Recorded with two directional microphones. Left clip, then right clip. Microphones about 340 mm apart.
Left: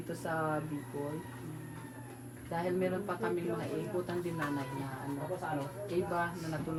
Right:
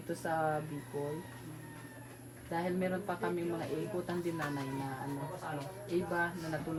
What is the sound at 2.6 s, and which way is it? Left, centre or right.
Speech, right.